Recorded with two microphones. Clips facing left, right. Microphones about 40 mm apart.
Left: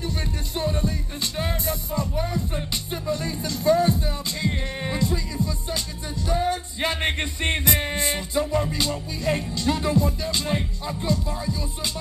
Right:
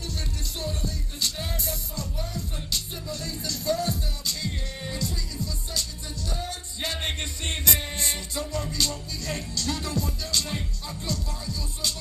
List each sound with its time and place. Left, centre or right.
0.6 s music: left